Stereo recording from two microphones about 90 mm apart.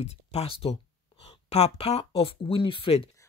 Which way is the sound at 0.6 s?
75° left (ahead or behind).